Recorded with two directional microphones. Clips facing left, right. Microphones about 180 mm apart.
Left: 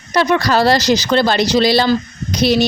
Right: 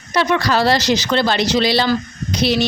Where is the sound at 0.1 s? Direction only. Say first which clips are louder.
Left 2 dB; 40° left (ahead or behind).